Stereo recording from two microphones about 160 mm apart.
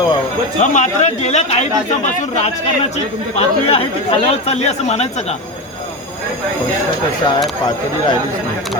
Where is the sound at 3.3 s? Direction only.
40° left (ahead or behind).